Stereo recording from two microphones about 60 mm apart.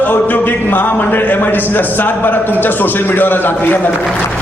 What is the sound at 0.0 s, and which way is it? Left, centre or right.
A man's voice, left.